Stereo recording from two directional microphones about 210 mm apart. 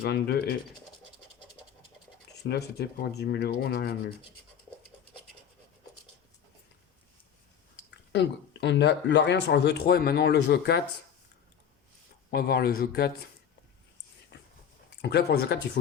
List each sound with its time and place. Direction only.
0.0 s speech: 50° left (ahead or behind)
2.4 s speech: 50° left (ahead or behind)
7.9 s speech: 55° left (ahead or behind)
12.3 s speech: 45° left (ahead or behind)
14.3 s a sound: 55° left (ahead or behind)
14.8 s a man's voice: 55° left (ahead or behind)